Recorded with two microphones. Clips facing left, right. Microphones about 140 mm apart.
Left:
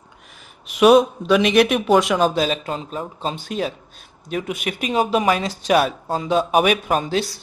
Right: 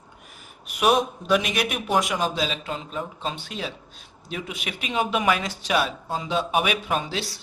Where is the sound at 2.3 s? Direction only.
45° left (ahead or behind).